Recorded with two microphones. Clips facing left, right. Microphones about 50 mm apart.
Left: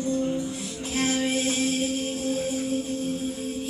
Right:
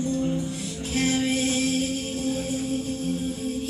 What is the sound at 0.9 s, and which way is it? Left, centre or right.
Music, left.